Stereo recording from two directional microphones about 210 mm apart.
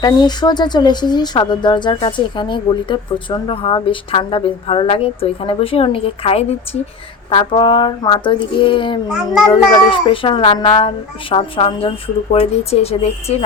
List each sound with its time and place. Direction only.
0.0 s speech: 20° left (ahead or behind)
9.0 s a child's voice: centre (ahead or behind)
9.5 s speech: 25° left (ahead or behind)